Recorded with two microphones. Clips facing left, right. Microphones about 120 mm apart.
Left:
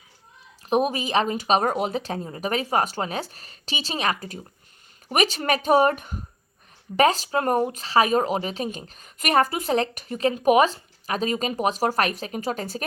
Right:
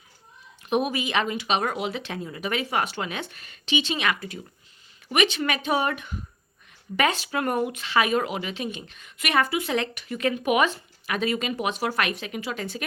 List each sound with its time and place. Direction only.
0.7 s speech: 35° left (ahead or behind)